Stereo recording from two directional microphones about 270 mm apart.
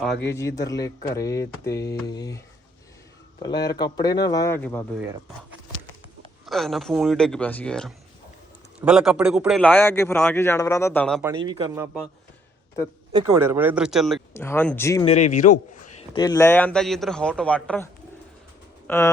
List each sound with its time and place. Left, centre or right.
0.0 s a man's voice: centre
0.3 s speech: centre
3.4 s speech: centre
6.4 s a man's voice: centre
11.2 s speech: centre
13.1 s speech: centre
15.0 s speech: left
16.1 s a man's voice: centre
18.9 s speech: centre